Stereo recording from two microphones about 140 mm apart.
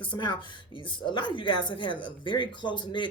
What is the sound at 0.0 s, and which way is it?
Speech, 35° left (ahead or behind).